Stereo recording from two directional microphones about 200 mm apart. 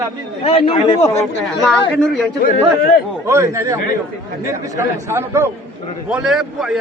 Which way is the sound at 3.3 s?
15° right (ahead or behind).